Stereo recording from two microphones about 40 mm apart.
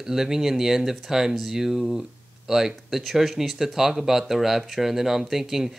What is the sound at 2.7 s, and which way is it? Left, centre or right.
Speech, centre.